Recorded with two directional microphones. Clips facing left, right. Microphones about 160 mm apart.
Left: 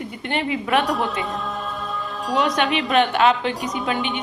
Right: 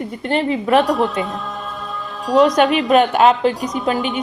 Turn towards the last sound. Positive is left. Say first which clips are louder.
# right 4 dB
turn(degrees=0)  # may be behind; listen again after turning